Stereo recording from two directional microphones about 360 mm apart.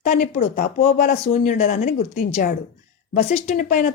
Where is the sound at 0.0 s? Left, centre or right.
Left.